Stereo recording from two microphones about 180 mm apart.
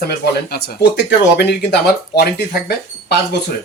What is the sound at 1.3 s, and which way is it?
Speech, 65° left (ahead or behind).